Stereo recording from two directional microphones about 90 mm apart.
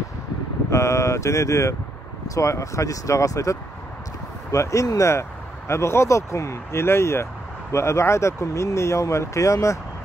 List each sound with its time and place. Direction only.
0.7 s speech: 35° left (ahead or behind)